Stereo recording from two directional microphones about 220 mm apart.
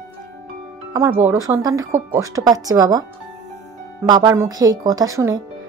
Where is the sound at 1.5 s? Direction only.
15° right (ahead or behind).